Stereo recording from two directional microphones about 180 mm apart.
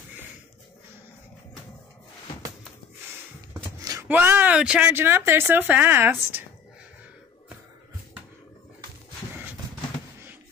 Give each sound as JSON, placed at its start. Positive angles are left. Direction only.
{"t": 3.8, "sound": "a sound", "side_deg": -20}
{"t": 4.1, "sound": "speech", "side_deg": -10}
{"t": 9.3, "sound": "horse", "side_deg": -10}